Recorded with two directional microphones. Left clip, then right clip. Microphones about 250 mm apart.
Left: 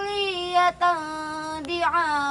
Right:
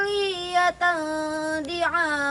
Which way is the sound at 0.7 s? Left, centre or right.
Centre.